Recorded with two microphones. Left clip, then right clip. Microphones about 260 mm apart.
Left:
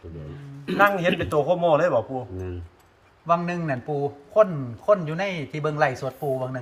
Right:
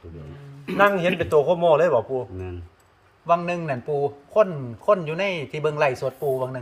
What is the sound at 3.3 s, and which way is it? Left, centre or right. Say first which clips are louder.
Speech: right 2 dB; right.